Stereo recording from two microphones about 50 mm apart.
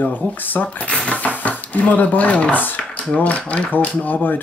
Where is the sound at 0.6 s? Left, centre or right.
Left.